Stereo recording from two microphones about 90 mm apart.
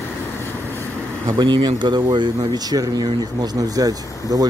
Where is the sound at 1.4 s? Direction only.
60° right (ahead or behind).